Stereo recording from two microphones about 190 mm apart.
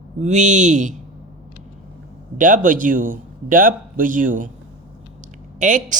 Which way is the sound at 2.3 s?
45° right (ahead or behind).